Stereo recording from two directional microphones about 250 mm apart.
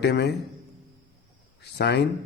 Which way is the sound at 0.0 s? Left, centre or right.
Left.